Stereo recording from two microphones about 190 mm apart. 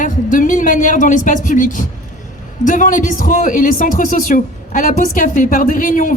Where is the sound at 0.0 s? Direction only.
45° left (ahead or behind).